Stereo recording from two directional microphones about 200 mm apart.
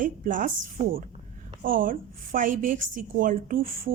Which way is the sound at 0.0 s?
40° right (ahead or behind).